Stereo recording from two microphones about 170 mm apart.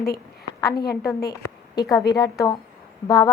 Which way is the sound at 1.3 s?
20° left (ahead or behind).